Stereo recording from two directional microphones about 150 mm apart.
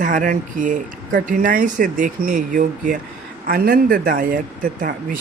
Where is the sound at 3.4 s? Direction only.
80° right.